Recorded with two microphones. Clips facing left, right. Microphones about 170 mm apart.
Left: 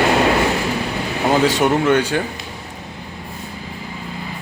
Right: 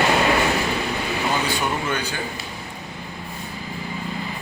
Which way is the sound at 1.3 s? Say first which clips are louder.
Left 12 dB; 85° left.